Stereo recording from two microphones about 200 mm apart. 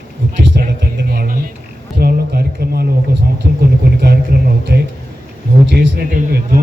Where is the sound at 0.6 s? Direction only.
50° right (ahead or behind).